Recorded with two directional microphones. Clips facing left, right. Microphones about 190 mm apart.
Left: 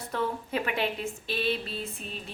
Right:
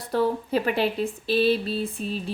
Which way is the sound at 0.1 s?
35° right (ahead or behind).